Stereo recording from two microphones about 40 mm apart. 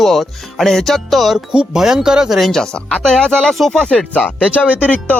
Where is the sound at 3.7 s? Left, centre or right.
Centre.